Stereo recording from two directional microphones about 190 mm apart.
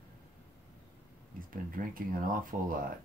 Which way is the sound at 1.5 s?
45° right (ahead or behind).